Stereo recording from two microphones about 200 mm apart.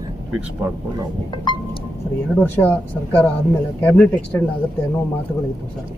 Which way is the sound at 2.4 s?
10° left (ahead or behind).